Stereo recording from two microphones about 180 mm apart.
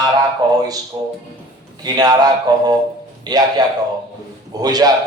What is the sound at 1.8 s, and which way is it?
A man's voice, 20° right (ahead or behind).